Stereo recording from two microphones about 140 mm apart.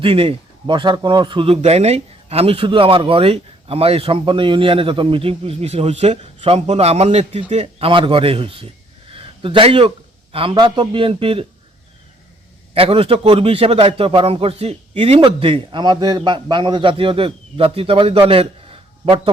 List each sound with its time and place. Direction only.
0.0 s a man's voice: 40° right (ahead or behind)
9.1 s a sound: 40° right (ahead or behind)
10.3 s a man's voice: 40° right (ahead or behind)
12.7 s a man's voice: 45° right (ahead or behind)